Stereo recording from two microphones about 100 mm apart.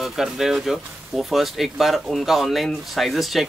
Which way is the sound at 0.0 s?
5° right (ahead or behind).